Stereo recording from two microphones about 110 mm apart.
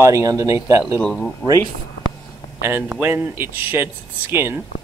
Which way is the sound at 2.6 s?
20° right (ahead or behind).